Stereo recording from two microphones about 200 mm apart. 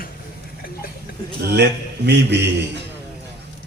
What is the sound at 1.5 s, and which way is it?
Speech, 55° right (ahead or behind).